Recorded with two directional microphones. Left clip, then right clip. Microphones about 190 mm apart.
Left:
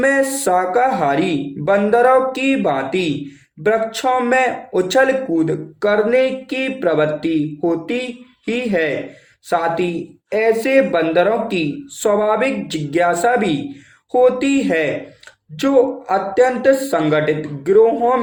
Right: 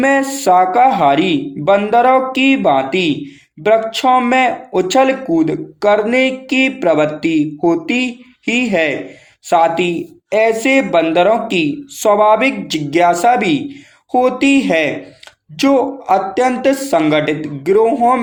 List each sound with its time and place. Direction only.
0.0 s speech: 30° right (ahead or behind)